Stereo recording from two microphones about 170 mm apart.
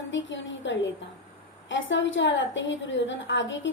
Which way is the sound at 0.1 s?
90° left.